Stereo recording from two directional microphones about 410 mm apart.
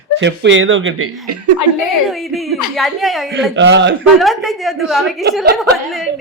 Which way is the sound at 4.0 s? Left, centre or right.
Centre.